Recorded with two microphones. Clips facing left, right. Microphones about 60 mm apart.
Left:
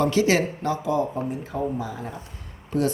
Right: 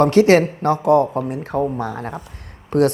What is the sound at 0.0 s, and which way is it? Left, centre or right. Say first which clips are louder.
Speech: right 8 dB; right.